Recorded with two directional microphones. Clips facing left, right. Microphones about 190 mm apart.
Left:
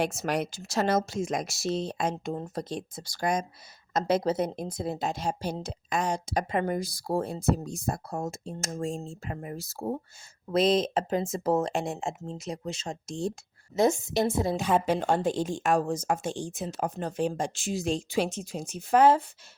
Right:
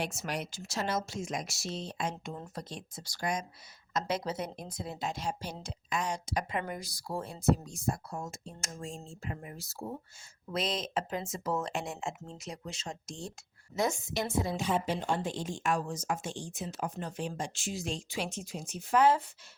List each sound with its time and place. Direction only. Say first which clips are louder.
0.2 s speech: left 8 dB; 40° left (ahead or behind)
1.5 s a woman's voice: left 9 dB; 35° left (ahead or behind)
7.9 s speech: left 3 dB; 55° left (ahead or behind)
8.3 s speech: left 9 dB; 30° left (ahead or behind); by 10.0 s 50° left (ahead or behind)
10.5 s speech: left 10 dB; 30° left (ahead or behind)
14.8 s speech: left 7 dB; 45° left (ahead or behind)
16.8 s speech: left 8 dB; 45° left (ahead or behind)